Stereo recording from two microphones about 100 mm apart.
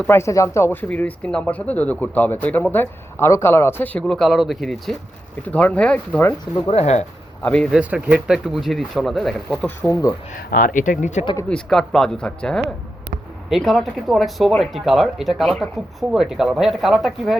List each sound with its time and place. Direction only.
0.1 s speech: 30° left (ahead or behind)
4.0 s speech: centre (ahead or behind)
5.4 s speech: 15° left (ahead or behind)
6.7 s speech: 90° left
7.4 s speech: 15° left (ahead or behind)
7.8 s speech: 15° right (ahead or behind); by 9.6 s centre (ahead or behind)
9.9 s speech: 35° left (ahead or behind)
11.4 s speech: 10° left (ahead or behind)